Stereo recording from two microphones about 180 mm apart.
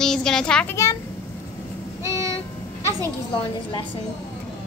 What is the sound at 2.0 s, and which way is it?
Vehicle, 15° right (ahead or behind).